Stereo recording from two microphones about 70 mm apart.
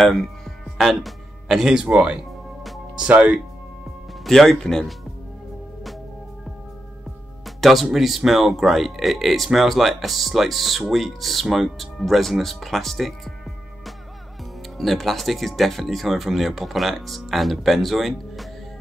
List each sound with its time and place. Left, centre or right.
0.0 s speech: centre
0.7 s music: centre
3.0 s speech: centre
4.2 s speech: centre
7.4 s speech: centre
14.8 s speech: centre